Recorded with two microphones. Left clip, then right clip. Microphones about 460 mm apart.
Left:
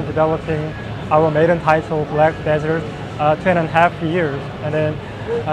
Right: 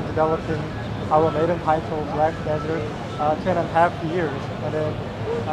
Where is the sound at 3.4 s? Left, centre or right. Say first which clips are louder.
Left 4 dB; left.